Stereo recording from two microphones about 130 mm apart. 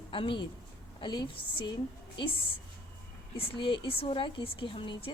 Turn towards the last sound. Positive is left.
turn(degrees=40)  # may be behind; listen again after turning